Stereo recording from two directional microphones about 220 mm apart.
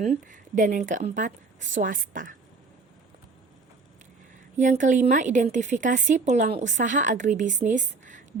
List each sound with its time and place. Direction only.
0.0 s a woman's voice: 35° right (ahead or behind)
4.5 s a woman's voice: 35° right (ahead or behind)